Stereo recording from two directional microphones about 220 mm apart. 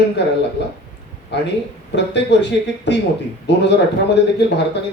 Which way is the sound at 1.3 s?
50° left (ahead or behind).